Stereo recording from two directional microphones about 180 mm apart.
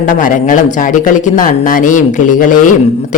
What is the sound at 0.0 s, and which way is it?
Speech, 45° left (ahead or behind).